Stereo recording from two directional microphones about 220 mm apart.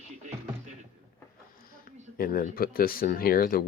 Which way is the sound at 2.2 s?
40° left (ahead or behind).